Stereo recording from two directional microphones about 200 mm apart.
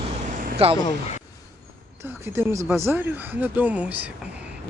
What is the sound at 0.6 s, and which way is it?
Speech, 30° right (ahead or behind).